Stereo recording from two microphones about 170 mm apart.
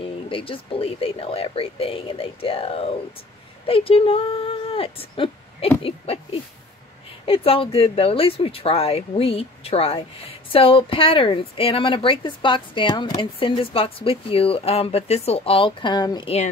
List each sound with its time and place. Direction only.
0.0 s speech: 30° left (ahead or behind)
7.2 s speech: 35° left (ahead or behind)